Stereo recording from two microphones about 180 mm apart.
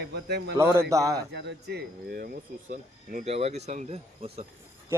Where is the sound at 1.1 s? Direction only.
70° right (ahead or behind); by 4.4 s 35° right (ahead or behind).